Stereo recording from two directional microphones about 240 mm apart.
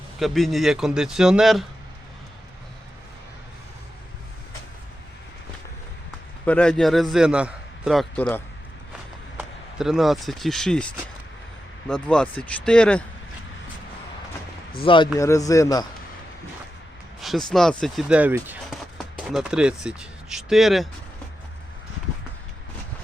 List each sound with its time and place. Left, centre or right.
0.2 s a man's voice: centre
6.4 s a man's voice: centre
9.4 s a man's voice: centre
14.8 s a man's voice: centre
17.2 s a man's voice: centre